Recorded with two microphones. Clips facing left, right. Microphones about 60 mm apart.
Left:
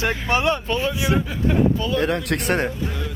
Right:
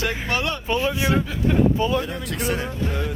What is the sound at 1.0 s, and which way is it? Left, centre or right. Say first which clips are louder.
Speech: even; centre.